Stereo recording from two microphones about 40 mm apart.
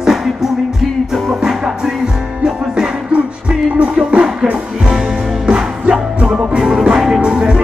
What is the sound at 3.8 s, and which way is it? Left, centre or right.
Music, right.